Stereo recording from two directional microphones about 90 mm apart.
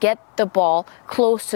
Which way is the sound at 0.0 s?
15° left (ahead or behind).